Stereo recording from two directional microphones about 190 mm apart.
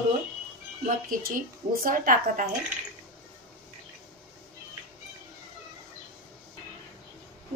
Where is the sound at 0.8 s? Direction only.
45° right (ahead or behind).